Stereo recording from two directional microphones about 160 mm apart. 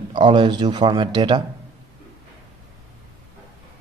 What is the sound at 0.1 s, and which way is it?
A man's voice, 30° right (ahead or behind).